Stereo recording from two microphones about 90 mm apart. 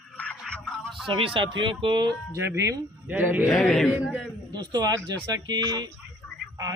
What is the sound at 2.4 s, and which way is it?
A man's voice, 25° right (ahead or behind).